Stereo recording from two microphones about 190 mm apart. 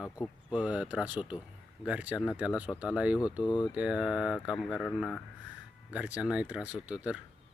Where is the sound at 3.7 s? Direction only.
5° right (ahead or behind).